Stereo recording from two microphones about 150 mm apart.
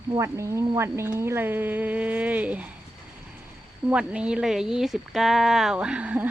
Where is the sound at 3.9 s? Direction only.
10° right (ahead or behind).